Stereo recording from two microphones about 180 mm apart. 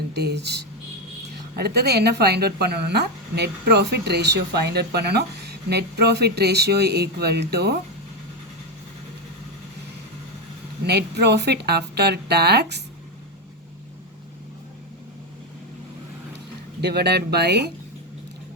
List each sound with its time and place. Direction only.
0.1 s a woman's voice: 65° right (ahead or behind)
10.8 s a woman's voice: 65° right (ahead or behind)
16.8 s speech: 70° right (ahead or behind)